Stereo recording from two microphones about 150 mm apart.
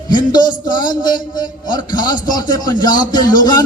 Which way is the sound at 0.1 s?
30° left (ahead or behind).